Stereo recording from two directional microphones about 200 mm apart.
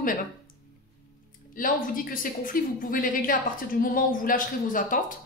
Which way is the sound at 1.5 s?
45° left (ahead or behind).